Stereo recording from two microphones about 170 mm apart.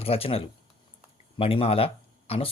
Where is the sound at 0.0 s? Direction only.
35° left (ahead or behind).